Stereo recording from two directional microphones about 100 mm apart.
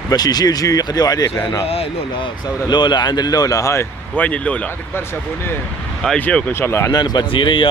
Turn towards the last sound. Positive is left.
turn(degrees=60)  # may be behind; listen again after turning